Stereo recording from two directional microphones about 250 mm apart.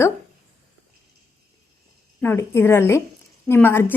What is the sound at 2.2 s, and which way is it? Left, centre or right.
A woman's voice, centre.